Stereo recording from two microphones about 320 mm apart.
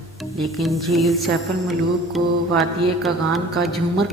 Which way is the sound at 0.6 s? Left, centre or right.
Centre.